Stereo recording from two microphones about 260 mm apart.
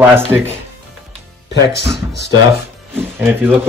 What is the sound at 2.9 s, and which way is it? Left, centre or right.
Music, centre.